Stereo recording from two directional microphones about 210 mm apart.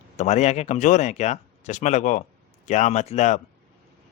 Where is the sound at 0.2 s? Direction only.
30° left (ahead or behind).